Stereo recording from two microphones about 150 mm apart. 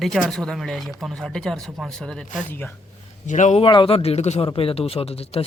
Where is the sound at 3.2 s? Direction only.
55° left (ahead or behind).